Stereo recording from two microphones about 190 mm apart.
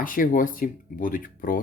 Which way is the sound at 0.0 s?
45° left (ahead or behind).